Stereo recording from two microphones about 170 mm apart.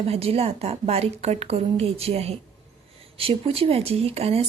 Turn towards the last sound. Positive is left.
turn(degrees=-35)  # may be behind; listen again after turning